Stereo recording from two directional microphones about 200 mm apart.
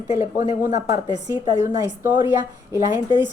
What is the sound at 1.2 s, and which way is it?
Speech, 15° right (ahead or behind).